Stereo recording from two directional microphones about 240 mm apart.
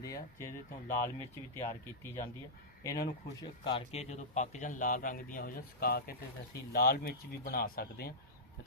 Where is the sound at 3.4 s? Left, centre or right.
Left.